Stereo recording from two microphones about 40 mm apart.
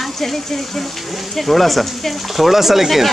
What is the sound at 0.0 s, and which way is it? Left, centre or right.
Speech, centre.